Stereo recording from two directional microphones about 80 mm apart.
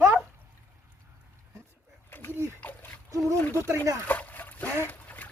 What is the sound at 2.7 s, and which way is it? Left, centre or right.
Splash, left.